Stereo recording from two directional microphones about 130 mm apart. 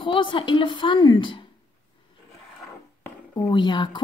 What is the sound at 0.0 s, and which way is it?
A woman's voice, 40° left (ahead or behind).